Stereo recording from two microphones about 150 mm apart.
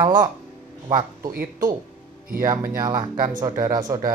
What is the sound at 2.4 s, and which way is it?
Speech, 25° right (ahead or behind).